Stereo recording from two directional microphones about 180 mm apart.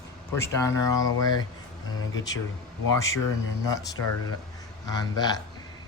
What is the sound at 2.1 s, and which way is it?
Speech, 90° left.